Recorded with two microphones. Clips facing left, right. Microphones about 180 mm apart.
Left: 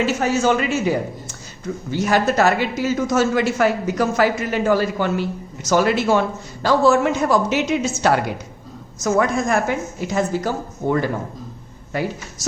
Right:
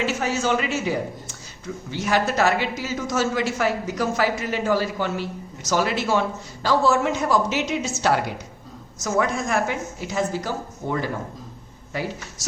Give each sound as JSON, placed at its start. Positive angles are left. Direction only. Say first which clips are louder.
{"t": 0.0, "sound": "a woman's voice", "louder": "left 5 dB", "side_deg": 45}